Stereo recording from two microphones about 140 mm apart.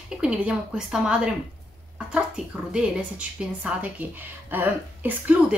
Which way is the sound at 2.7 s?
5° right (ahead or behind).